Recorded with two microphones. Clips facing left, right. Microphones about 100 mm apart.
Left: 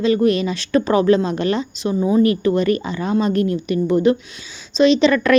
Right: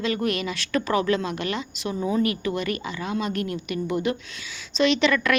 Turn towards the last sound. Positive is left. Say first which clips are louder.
# left 7 dB
turn(degrees=30)  # may be behind; listen again after turning